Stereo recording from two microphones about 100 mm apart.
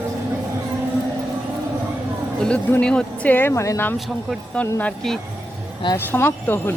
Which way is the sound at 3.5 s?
30° left (ahead or behind).